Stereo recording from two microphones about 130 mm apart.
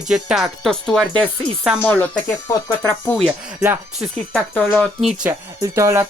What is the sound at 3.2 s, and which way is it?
Speech, 10° right (ahead or behind).